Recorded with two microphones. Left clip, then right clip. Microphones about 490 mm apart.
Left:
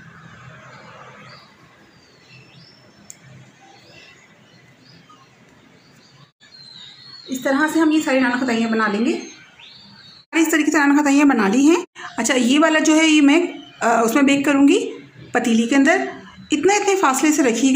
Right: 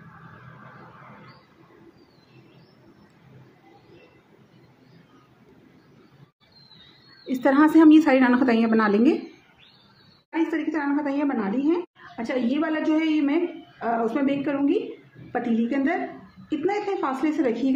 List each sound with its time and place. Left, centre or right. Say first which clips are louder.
7.4 s a woman's voice: right 2 dB; right
10.3 s a woman's voice: left 9 dB; right